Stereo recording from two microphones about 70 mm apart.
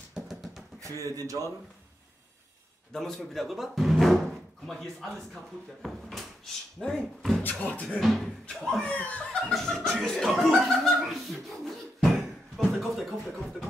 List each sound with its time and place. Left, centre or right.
0.1 s music: centre
1.0 s speech: right
2.9 s speech: centre
7.4 s speech: left
8.0 s speech: centre
8.8 s speech: centre
9.5 s speech: centre
11.0 s a sound: centre
12.5 s speech: centre